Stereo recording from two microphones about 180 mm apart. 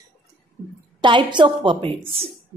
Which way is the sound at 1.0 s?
25° right (ahead or behind).